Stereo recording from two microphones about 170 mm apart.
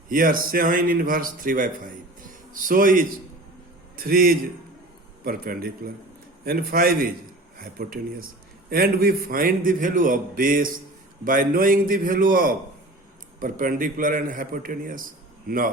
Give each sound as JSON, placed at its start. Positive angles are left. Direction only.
{"t": 0.1, "sound": "a man's voice", "side_deg": -55}